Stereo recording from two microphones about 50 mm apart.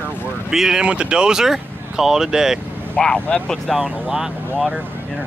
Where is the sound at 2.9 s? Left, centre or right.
Centre.